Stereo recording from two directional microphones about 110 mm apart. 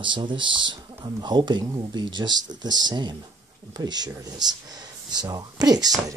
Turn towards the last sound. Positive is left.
turn(degrees=-35)  # may be behind; listen again after turning